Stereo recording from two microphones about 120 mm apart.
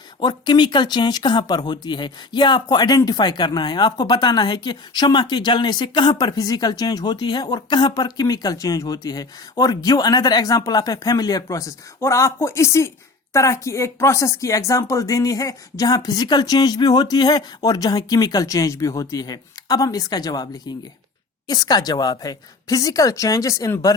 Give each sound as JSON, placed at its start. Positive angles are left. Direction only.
{"t": 0.2, "sound": "a woman's voice", "side_deg": 40}